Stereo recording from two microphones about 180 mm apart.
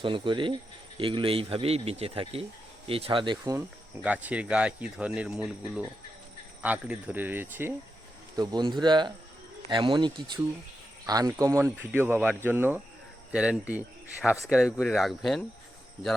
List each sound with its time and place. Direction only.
0.0 s speech: 25° right (ahead or behind)
4.0 s speech: 10° right (ahead or behind)
8.4 s speech: 25° right (ahead or behind); by 15.4 s centre (ahead or behind)